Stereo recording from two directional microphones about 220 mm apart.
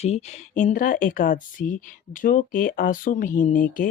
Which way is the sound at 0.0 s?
30° left (ahead or behind).